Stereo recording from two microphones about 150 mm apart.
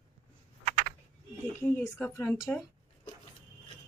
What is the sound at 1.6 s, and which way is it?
Speech, 15° left (ahead or behind).